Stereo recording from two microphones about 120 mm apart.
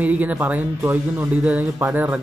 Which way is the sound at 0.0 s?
15° right (ahead or behind).